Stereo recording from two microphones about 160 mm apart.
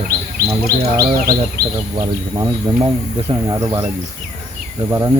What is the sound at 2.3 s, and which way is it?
Speech, 25° right (ahead or behind).